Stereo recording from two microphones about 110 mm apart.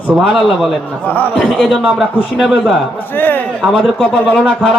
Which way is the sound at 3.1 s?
15° left (ahead or behind).